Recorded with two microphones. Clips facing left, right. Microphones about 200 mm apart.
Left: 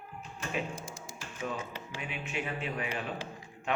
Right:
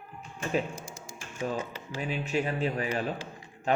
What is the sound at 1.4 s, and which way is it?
Speech, 35° right (ahead or behind).